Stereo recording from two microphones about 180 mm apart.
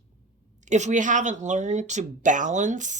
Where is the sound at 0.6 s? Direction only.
40° right (ahead or behind).